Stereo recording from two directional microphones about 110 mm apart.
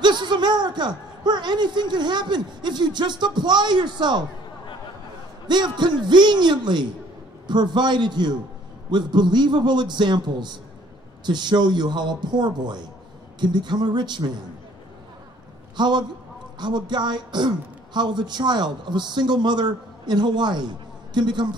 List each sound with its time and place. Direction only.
0.0 s speech: 45° right (ahead or behind)
5.5 s a man's voice: 40° right (ahead or behind)
15.7 s speech: 45° right (ahead or behind)